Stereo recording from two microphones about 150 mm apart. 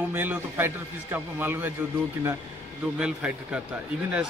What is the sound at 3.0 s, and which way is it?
Speech, 5° right (ahead or behind).